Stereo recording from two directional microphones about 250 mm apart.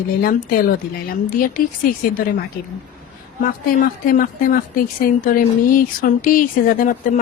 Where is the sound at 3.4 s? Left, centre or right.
Left.